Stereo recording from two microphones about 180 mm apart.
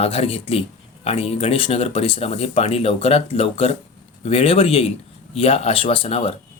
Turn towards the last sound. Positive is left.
turn(degrees=30)  # may be behind; listen again after turning